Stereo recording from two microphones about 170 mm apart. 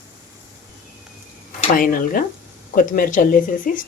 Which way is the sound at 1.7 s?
55° left (ahead or behind).